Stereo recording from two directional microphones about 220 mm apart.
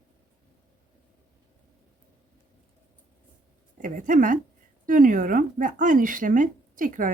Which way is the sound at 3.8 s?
35° right (ahead or behind).